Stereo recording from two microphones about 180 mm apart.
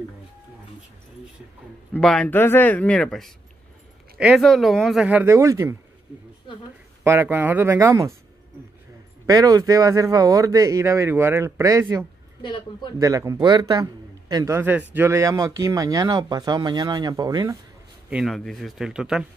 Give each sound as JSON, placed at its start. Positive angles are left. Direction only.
{"t": 2.0, "sound": "speech", "side_deg": 5}
{"t": 7.1, "sound": "speech", "side_deg": -15}
{"t": 9.2, "sound": "speech", "side_deg": -20}
{"t": 12.4, "sound": "speech", "side_deg": 25}
{"t": 13.0, "sound": "speech", "side_deg": -20}
{"t": 18.1, "sound": "speech", "side_deg": 0}